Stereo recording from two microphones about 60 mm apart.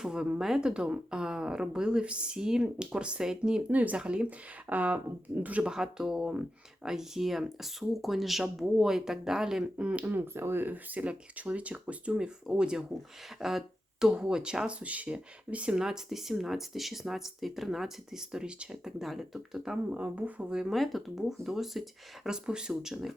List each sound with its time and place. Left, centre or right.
0.0 s a woman's voice: centre
3.7 s speech: right
5.7 s a woman's voice: centre
9.7 s speech: right
10.1 s a woman's voice: right; by 15.9 s centre
15.9 s speech: centre
18.9 s speech: centre
19.9 s speech: right
20.5 s a woman's voice: centre
20.7 s speech: centre